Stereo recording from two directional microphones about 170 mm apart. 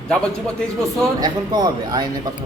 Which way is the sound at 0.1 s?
5° left (ahead or behind).